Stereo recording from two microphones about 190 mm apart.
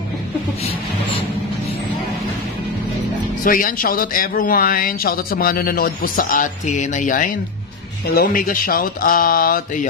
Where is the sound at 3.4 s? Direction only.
45° left (ahead or behind).